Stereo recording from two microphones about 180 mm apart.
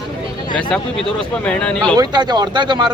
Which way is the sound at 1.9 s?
20° right (ahead or behind).